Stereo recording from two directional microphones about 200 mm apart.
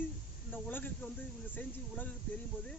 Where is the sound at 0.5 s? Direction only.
10° left (ahead or behind).